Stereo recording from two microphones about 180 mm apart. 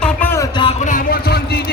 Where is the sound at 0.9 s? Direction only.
50° left (ahead or behind).